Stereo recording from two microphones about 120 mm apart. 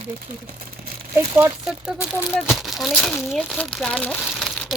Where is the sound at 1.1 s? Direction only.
20° right (ahead or behind); by 4.3 s 5° left (ahead or behind).